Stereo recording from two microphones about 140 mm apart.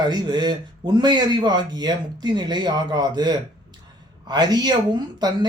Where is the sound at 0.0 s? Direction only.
30° right (ahead or behind).